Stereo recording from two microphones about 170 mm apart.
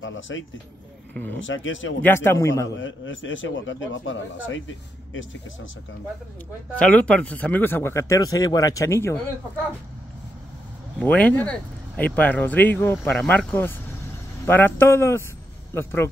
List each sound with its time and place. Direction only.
1.4 s speech: 90° left
2.0 s speech: 15° left (ahead or behind)
3.1 s speech: 90° left
6.8 s speech: 10° left (ahead or behind)
11.0 s speech: 10° left (ahead or behind)